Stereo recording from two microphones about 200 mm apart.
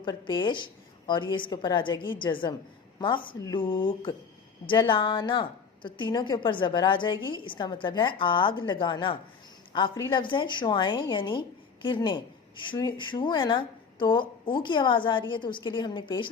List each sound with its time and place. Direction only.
0.0 s a woman's voice: 20° left (ahead or behind)